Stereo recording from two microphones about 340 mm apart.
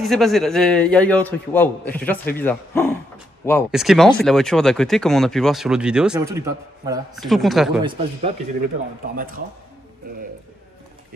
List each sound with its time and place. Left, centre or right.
0.0 s speech: centre
7.8 s a man's voice: centre